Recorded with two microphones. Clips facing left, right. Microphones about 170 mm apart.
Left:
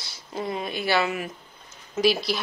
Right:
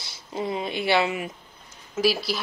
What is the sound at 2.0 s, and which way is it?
Speech, 5° right (ahead or behind).